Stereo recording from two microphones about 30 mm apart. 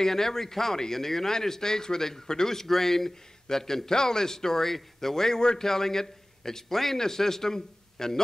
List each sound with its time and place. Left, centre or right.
0.0 s speech: centre
5.4 s a man's voice: left
5.7 s a man's voice: centre